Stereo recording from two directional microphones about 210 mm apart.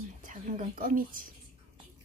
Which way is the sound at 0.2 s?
40° right (ahead or behind).